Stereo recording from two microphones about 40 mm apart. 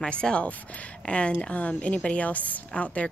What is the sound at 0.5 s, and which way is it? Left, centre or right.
Speech, left.